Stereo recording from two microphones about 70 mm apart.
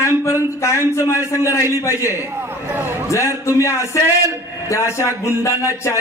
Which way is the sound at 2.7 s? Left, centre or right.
Right.